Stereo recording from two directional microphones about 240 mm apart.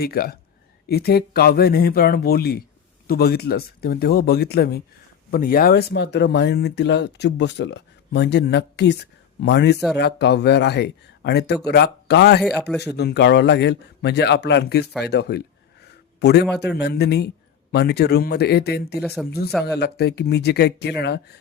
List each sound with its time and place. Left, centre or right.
0.0 s speech: left
19.0 s speech: centre
19.8 s speech: left